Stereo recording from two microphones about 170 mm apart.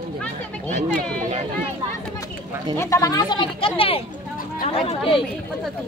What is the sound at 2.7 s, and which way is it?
Speech, 15° left (ahead or behind).